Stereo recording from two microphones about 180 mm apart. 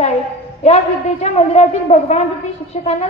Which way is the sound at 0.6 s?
35° left (ahead or behind).